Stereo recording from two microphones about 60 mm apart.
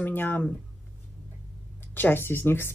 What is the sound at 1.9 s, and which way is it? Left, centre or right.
Speech, left.